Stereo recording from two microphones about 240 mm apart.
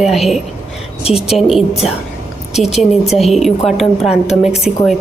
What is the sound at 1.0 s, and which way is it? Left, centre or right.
Speech, left.